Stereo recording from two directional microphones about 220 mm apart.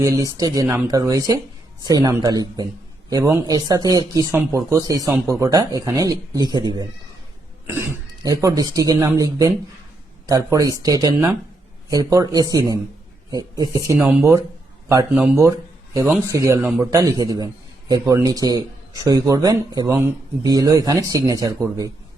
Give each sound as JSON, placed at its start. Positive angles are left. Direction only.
{"t": 0.0, "sound": "speech", "side_deg": -15}